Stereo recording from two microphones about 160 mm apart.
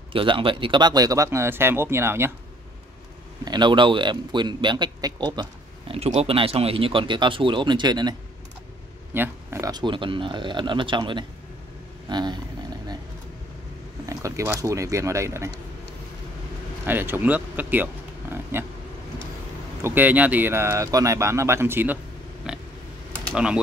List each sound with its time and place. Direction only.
0.1 s speech: 35° right (ahead or behind); by 2.3 s 15° right (ahead or behind)
3.4 s speech: 30° right (ahead or behind)
9.1 s speech: 15° right (ahead or behind); by 11.2 s 30° right (ahead or behind)
12.1 s a sound: 25° right (ahead or behind)
14.0 s speech: 20° right (ahead or behind)
16.8 s speech: 15° right (ahead or behind)
19.8 s speech: 10° right (ahead or behind)
22.5 s a sound: 5° right (ahead or behind)
23.3 s speech: 5° right (ahead or behind)